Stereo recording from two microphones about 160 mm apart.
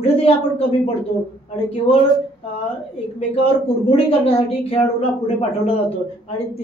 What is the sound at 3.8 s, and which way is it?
Speech, 40° left (ahead or behind).